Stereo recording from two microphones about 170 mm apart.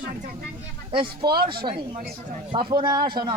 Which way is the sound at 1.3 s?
65° right (ahead or behind).